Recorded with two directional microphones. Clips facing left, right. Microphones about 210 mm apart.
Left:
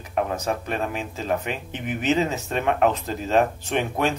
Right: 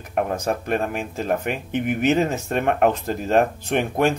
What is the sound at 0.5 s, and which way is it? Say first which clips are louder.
Speech: right 3 dB; 50° right (ahead or behind).